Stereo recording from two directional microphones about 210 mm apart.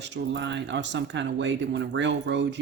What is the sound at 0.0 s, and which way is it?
Speech, 60° right (ahead or behind).